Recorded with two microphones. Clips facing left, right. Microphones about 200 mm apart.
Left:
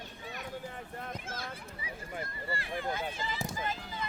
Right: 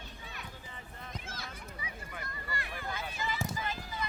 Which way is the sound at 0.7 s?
55° left (ahead or behind).